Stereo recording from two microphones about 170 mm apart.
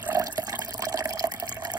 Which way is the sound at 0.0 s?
10° right (ahead or behind).